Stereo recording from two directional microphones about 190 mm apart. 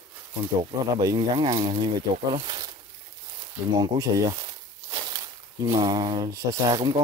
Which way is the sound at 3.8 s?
20° right (ahead or behind).